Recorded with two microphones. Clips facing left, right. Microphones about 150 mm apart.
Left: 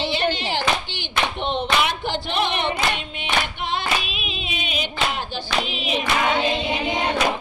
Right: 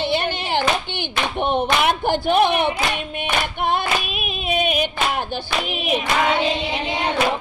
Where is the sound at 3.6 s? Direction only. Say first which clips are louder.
Right 4 dB; 55° right (ahead or behind).